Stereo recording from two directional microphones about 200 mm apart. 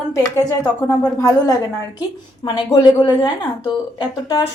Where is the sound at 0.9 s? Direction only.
15° left (ahead or behind).